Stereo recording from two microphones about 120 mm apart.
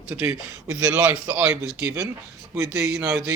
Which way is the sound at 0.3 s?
30° right (ahead or behind).